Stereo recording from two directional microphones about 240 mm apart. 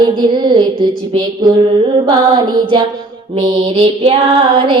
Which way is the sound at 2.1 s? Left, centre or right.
Centre.